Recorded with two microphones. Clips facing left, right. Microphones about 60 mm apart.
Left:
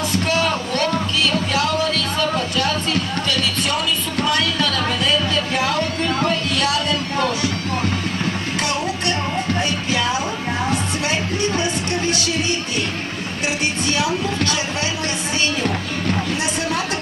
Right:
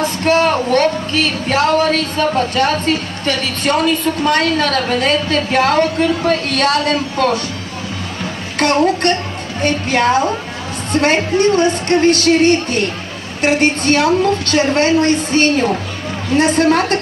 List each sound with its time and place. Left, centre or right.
0.0 s speech: right
8.5 s speech: right